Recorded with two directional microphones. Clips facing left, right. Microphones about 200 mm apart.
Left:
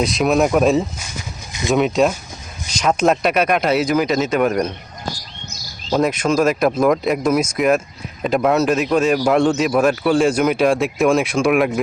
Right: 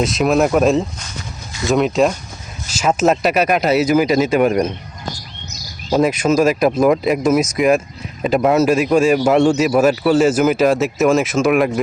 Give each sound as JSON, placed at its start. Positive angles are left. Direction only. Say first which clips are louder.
{"t": 0.0, "sound": "a man's voice", "louder": "right 1 dB", "side_deg": 0}
{"t": 5.9, "sound": "a man's voice", "louder": "right 2 dB", "side_deg": -5}